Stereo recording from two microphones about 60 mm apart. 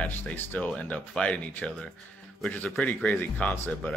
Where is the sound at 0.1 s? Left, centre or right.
Left.